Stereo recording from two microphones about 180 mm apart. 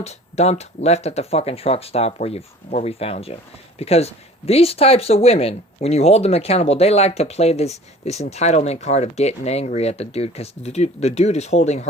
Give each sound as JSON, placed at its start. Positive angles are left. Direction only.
{"t": 0.0, "sound": "speech", "side_deg": 35}